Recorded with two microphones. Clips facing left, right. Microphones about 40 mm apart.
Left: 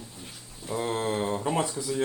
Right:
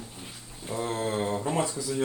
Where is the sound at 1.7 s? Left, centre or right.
Left.